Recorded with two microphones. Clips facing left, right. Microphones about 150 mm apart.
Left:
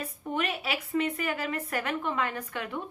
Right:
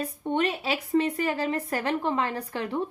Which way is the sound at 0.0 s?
30° right (ahead or behind).